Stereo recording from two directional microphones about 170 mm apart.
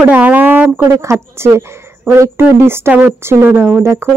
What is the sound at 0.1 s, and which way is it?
A woman's voice, 10° right (ahead or behind).